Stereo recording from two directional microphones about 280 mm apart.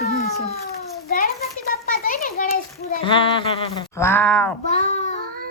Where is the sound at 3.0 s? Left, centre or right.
Centre.